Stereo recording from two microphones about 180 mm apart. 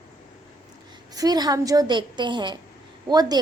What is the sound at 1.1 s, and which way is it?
A woman's voice, 20° right (ahead or behind).